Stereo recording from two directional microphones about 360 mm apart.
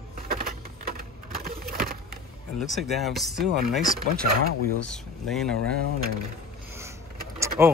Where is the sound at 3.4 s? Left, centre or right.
Right.